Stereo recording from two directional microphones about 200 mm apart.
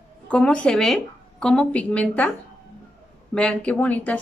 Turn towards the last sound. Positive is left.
turn(degrees=5)  # may be behind; listen again after turning